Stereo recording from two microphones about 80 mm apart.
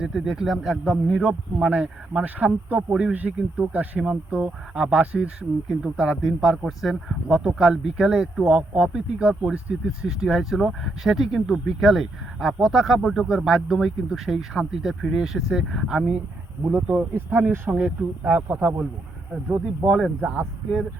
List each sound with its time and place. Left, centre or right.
0.0 s speech: centre